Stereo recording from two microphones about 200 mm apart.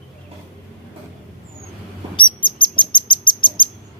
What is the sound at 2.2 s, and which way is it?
Bird, 25° left (ahead or behind).